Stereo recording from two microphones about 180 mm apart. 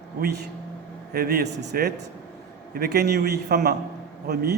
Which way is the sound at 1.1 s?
60° right (ahead or behind).